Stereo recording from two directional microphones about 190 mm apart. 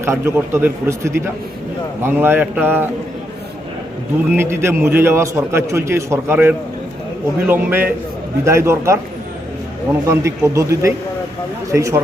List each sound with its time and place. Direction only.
0.0 s a man's voice: 15° right (ahead or behind)
4.4 s a man's voice: 15° right (ahead or behind)
10.1 s a man's voice: 15° right (ahead or behind)